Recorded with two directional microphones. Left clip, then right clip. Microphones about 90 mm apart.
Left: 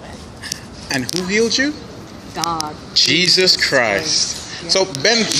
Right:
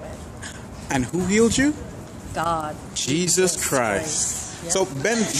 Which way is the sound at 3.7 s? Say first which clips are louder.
Left 6 dB; 30° right (ahead or behind).